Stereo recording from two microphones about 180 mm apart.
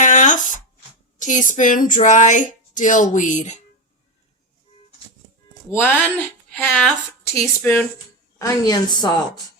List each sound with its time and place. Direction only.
0.0 s a sound: 45° left (ahead or behind)
1.2 s speech: 45° left (ahead or behind)
5.7 s a woman's voice: 10° left (ahead or behind)